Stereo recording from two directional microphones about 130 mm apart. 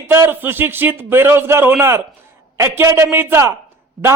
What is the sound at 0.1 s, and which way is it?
A man's voice, 15° right (ahead or behind).